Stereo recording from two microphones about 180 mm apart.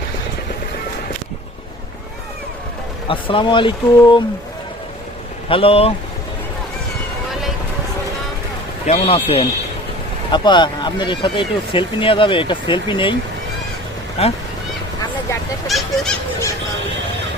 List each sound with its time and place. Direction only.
3.1 s speech: 30° left (ahead or behind)
5.5 s speech: 30° left (ahead or behind)
8.9 s speech: 35° left (ahead or behind)
14.2 s speech: 35° left (ahead or behind)
15.6 s goose: centre (ahead or behind)